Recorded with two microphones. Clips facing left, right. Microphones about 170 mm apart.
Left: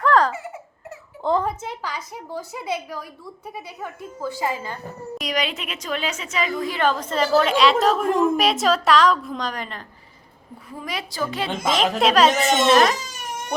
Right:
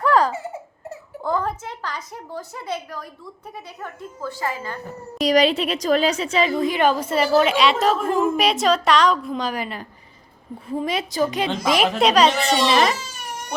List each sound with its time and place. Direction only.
0.0 s baby laughter: 10° right (ahead or behind)
1.2 s a sound: 25° left (ahead or behind)
1.5 s a woman's voice: 5° left (ahead or behind)
5.2 s a woman's voice: 35° right (ahead or behind); by 9.8 s 10° right (ahead or behind)
10.7 s a woman's voice: 25° right (ahead or behind)
11.9 s a woman's voice: centre (ahead or behind)